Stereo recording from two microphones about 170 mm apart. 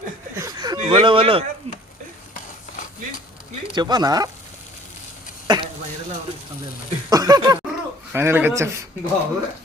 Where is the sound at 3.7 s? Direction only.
25° right (ahead or behind).